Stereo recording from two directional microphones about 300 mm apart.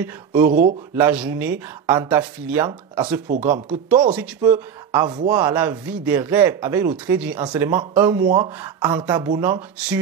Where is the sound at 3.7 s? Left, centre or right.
Centre.